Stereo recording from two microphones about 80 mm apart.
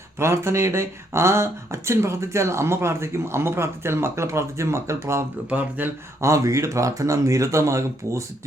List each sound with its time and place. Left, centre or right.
0.2 s speech: right
5.5 s speech: right
6.2 s speech: right